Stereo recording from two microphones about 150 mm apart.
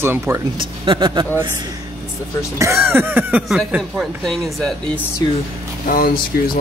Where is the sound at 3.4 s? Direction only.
Centre (ahead or behind).